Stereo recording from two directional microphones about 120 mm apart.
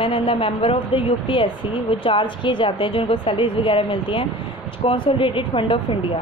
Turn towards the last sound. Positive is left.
turn(degrees=50)  # may be behind; listen again after turning